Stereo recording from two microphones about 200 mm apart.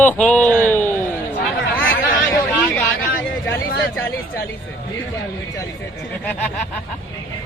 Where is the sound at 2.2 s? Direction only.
5° left (ahead or behind).